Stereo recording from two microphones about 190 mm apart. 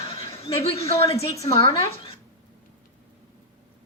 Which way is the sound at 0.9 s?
30° left (ahead or behind).